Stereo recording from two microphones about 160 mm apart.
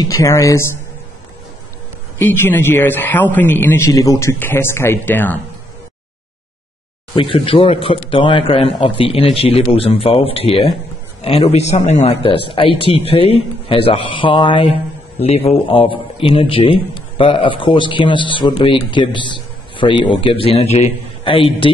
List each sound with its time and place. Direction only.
0.0 s speech: 20° left (ahead or behind)
2.1 s a man's voice: 15° left (ahead or behind)
7.2 s a man's voice: 35° left (ahead or behind)